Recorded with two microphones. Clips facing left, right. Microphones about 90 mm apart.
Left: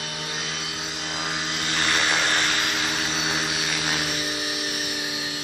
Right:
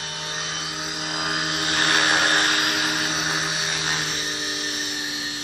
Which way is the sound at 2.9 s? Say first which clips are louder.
Right 1 dB; 5° right (ahead or behind).